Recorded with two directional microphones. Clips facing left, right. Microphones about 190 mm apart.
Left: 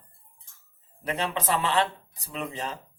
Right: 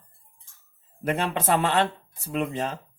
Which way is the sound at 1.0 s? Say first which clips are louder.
Right 3 dB; 50° right (ahead or behind).